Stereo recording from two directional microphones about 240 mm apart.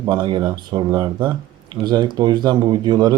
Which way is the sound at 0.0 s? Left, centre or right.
Centre.